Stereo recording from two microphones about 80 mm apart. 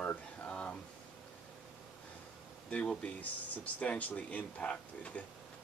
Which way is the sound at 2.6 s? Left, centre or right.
Centre.